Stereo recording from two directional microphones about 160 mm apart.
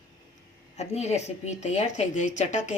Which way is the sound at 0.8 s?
45° left (ahead or behind).